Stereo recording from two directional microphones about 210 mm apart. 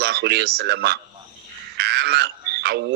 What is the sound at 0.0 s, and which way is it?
A man's voice, 50° right (ahead or behind).